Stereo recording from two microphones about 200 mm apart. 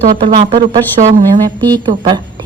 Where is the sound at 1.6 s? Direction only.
20° right (ahead or behind).